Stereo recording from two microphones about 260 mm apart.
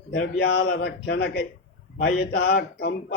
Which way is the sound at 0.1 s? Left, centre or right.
Left.